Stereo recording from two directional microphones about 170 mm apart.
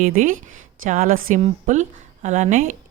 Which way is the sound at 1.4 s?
45° right (ahead or behind).